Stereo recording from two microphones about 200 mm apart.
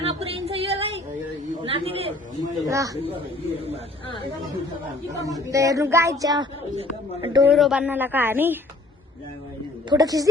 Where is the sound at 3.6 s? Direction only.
30° right (ahead or behind).